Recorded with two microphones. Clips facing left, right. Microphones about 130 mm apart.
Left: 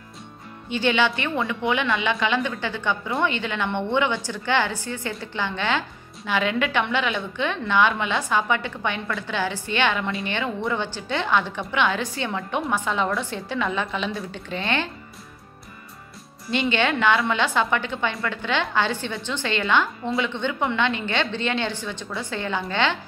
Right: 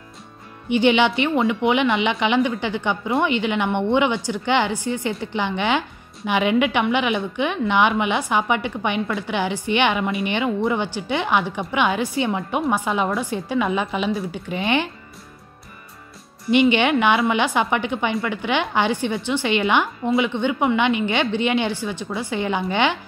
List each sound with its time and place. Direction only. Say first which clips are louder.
0.7 s speech: right 5 dB; 15° right (ahead or behind)
16.4 s speech: right 6 dB; 15° right (ahead or behind)